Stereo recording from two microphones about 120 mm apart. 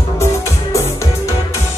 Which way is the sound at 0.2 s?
25° left (ahead or behind).